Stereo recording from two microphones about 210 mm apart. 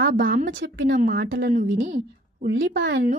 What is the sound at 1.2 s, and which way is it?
Speech, 60° right (ahead or behind).